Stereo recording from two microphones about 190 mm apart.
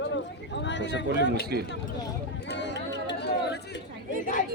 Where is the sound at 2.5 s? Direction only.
65° left (ahead or behind).